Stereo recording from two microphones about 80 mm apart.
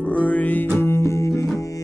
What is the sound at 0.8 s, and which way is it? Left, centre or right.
Music, left.